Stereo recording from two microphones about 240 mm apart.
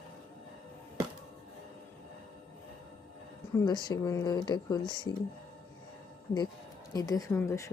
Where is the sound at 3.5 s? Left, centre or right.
Centre.